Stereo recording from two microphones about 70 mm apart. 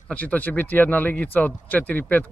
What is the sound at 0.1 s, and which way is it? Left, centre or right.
Speech, left.